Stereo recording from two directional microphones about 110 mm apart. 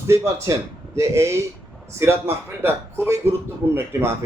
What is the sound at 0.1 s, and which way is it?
A man's voice, 25° right (ahead or behind).